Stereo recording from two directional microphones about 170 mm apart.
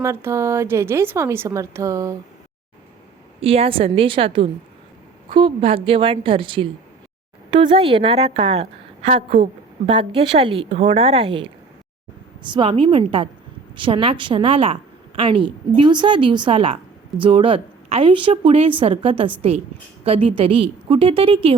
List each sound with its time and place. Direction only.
0.0 s a woman's voice: 15° right (ahead or behind)
3.4 s a woman's voice: 35° right (ahead or behind)